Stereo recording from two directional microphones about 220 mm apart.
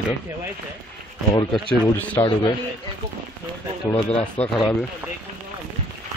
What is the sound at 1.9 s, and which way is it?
Speech, 10° left (ahead or behind).